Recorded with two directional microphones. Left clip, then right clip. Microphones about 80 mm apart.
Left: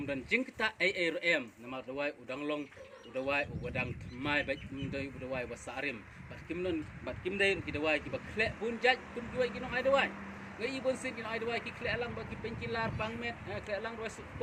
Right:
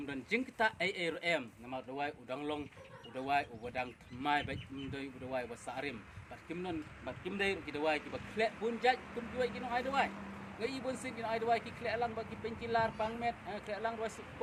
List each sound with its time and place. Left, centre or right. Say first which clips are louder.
0.1 s speech: left 4 dB; right
7.0 s speech: left 5 dB; right